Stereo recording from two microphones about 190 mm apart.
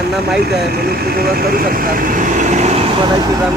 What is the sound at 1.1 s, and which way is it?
Speech, 50° right (ahead or behind).